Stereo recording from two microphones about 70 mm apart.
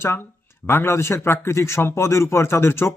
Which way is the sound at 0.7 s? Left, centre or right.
Left.